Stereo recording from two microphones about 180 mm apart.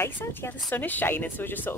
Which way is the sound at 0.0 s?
10° left (ahead or behind).